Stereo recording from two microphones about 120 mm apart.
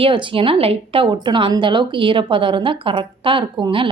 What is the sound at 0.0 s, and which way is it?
A woman's voice, 45° right (ahead or behind).